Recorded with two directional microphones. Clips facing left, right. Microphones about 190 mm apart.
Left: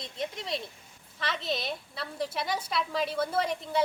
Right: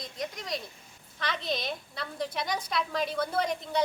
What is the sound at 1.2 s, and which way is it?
A woman's voice, 5° left (ahead or behind).